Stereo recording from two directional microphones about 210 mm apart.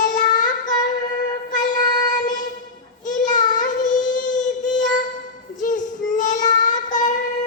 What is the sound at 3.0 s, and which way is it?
Child singing, 35° left (ahead or behind).